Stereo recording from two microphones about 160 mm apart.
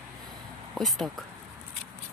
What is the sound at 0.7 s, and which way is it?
Speech, centre (ahead or behind).